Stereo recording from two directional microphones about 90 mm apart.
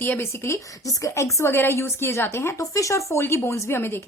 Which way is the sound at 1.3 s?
30° left (ahead or behind).